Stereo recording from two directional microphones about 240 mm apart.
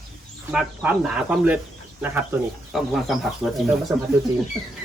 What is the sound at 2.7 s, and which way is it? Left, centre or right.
Speech, centre.